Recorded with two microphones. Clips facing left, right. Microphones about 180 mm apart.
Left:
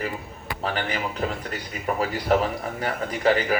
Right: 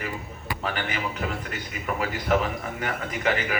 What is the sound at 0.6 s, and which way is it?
A man's voice, 35° left (ahead or behind).